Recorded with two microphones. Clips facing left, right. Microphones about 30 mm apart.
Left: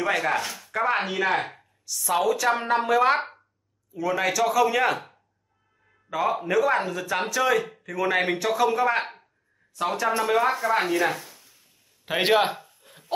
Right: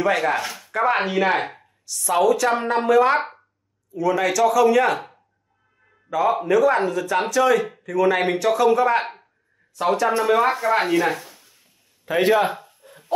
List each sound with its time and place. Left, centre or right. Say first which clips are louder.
0.0 s a woman's voice: right 4 dB; centre
6.1 s a man's voice: right 5 dB; centre
6.4 s a woman's voice: right 5 dB; centre
12.2 s a man's voice: right 3 dB; left
12.8 s a sound: right 5 dB; centre